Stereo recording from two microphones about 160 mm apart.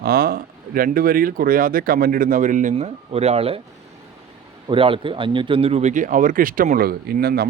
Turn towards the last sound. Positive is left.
turn(degrees=-80)